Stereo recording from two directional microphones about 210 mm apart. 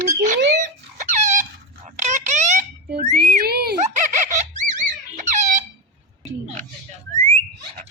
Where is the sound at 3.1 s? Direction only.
45° right (ahead or behind).